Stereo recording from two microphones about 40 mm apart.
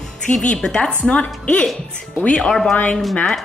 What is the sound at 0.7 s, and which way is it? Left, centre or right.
Speech, left.